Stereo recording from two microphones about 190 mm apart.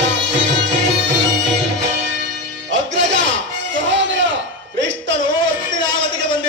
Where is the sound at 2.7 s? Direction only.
70° right (ahead or behind).